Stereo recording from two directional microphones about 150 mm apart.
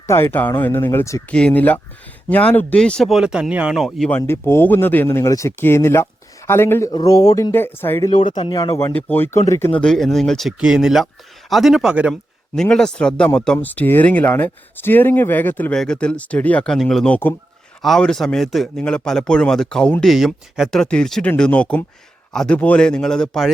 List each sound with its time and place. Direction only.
0.1 s speech: 15° left (ahead or behind)
1.3 s a man's voice: 5° left (ahead or behind)
4.2 s speech: 15° left (ahead or behind)
7.5 s speech: 15° left (ahead or behind)
8.4 s speech: 30° left (ahead or behind)
8.9 s a man's voice: 10° left (ahead or behind)